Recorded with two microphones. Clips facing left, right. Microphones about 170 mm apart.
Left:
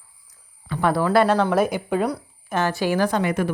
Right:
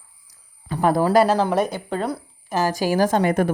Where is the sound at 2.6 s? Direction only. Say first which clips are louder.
Right 2 dB; 40° right (ahead or behind).